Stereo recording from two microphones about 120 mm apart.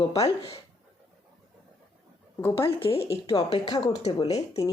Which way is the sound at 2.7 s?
50° left (ahead or behind).